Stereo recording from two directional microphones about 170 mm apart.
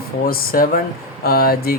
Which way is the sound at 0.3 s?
60° left (ahead or behind).